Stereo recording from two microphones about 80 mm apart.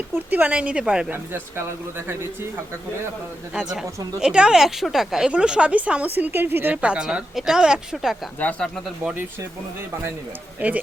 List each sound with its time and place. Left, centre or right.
0.3 s speech: centre
1.1 s speech: right
3.5 s speech: centre; by 6.7 s right
6.8 s speech: centre
8.4 s speech: centre
10.6 s speech: right